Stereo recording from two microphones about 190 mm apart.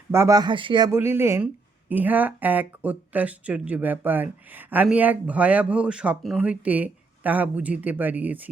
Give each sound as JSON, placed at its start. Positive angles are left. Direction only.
{"t": 0.1, "sound": "speech", "side_deg": -15}
{"t": 0.9, "sound": "speech", "side_deg": -15}